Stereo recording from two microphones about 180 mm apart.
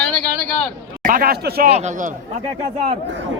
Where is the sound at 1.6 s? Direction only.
40° right (ahead or behind).